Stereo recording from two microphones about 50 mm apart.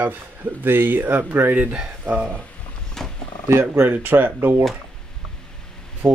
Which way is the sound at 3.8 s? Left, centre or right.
Right.